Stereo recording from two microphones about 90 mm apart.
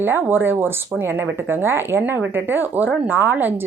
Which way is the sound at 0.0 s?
25° right (ahead or behind).